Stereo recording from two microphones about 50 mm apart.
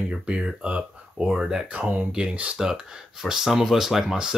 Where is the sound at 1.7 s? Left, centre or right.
Right.